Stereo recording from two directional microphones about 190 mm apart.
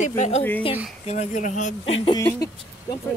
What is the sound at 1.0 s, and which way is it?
Speech, 40° left (ahead or behind).